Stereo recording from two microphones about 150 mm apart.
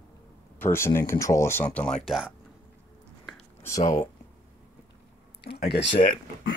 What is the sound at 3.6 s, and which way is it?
Speech, 20° left (ahead or behind).